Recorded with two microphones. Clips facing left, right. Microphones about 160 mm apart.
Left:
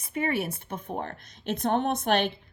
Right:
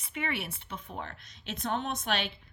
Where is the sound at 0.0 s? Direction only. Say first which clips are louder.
Left 7 dB; 40° left (ahead or behind).